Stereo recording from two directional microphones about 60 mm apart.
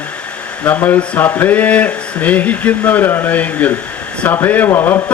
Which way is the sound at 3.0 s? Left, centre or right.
Left.